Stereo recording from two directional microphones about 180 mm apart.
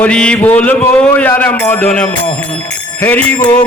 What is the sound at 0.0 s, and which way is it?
A man's voice, 5° left (ahead or behind).